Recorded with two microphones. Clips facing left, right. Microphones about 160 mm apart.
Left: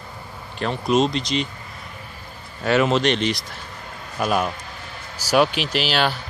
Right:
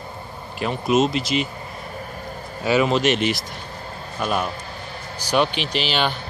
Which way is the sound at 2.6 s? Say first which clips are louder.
Even; centre (ahead or behind).